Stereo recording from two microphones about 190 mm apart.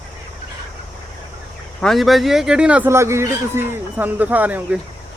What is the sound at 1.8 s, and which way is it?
A man's voice, centre (ahead or behind).